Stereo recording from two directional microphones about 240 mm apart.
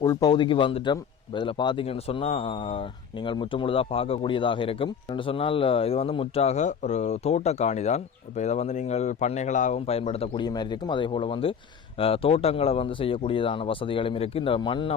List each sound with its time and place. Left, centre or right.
0.0 s speech: centre